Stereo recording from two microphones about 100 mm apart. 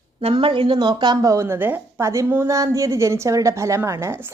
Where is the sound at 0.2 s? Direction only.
70° right (ahead or behind).